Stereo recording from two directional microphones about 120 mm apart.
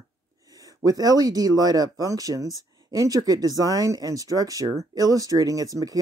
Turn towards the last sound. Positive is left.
turn(degrees=-30)  # may be behind; listen again after turning